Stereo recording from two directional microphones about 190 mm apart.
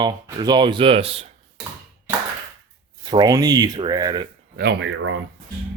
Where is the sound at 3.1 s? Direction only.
20° right (ahead or behind).